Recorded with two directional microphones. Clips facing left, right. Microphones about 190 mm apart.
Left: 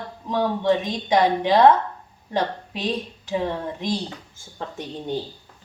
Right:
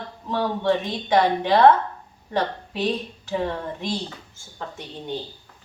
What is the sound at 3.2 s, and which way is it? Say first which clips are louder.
Speech: left 1 dB; 15° left (ahead or behind).